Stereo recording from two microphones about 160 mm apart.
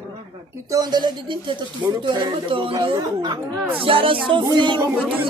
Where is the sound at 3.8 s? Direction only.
35° right (ahead or behind).